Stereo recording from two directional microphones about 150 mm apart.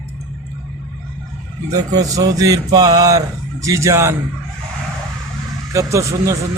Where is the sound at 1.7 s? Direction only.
25° right (ahead or behind).